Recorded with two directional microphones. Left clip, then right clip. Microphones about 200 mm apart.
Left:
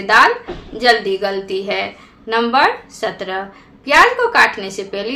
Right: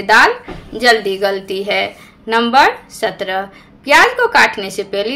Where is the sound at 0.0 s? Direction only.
30° right (ahead or behind).